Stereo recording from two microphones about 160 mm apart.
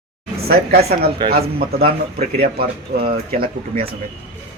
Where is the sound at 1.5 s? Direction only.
70° right (ahead or behind).